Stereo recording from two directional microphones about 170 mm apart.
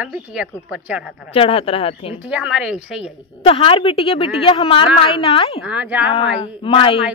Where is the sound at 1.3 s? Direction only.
35° left (ahead or behind).